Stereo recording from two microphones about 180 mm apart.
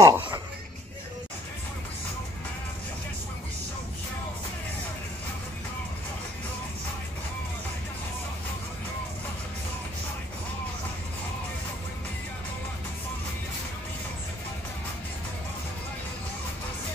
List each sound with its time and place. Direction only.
0.0 s music: 20° right (ahead or behind)